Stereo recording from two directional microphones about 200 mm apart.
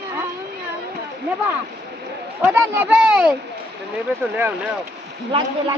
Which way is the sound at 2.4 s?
10° right (ahead or behind).